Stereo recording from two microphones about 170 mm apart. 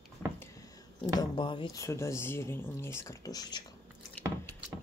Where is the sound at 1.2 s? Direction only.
30° left (ahead or behind).